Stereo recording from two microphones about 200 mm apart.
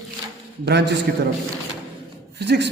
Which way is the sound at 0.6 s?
55° right (ahead or behind).